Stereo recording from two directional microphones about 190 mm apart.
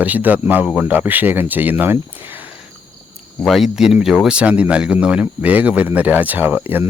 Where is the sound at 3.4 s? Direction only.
Centre (ahead or behind).